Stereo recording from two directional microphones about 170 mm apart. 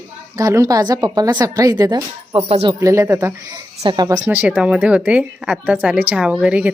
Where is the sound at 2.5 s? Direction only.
35° right (ahead or behind).